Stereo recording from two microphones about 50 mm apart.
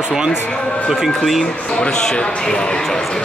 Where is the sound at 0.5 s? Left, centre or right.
Left.